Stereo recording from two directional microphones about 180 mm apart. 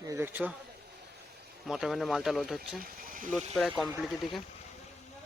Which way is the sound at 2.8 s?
50° right (ahead or behind).